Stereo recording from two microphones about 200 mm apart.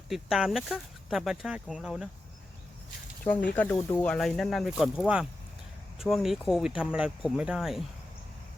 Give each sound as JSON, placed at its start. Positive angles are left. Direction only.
{"t": 0.1, "sound": "speech", "side_deg": 0}
{"t": 3.5, "sound": "speech", "side_deg": 10}